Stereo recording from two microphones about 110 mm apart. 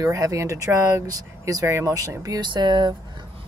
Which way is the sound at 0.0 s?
30° right (ahead or behind).